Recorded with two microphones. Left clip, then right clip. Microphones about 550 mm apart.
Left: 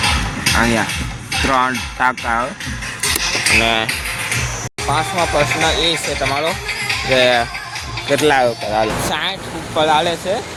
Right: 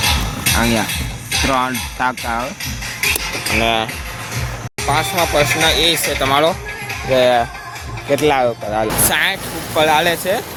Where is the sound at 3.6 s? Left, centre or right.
Right.